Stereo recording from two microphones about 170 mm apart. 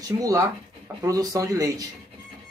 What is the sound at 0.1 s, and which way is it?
Speech, 20° right (ahead or behind).